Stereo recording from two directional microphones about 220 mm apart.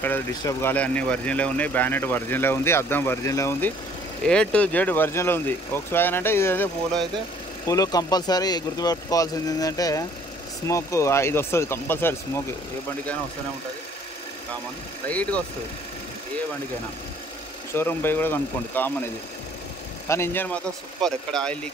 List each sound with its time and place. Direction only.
0.0 s speech: 10° left (ahead or behind)
15.0 s speech: 5° left (ahead or behind)
17.7 s speech: 10° left (ahead or behind)
20.1 s speech: 10° left (ahead or behind)